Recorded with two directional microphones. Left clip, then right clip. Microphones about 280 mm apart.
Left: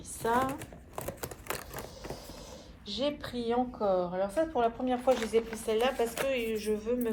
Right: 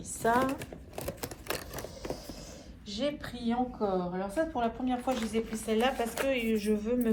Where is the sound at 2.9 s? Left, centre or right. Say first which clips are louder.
Left 1 dB; centre.